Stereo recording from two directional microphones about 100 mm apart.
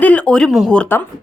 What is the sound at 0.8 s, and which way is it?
Speech, 20° left (ahead or behind).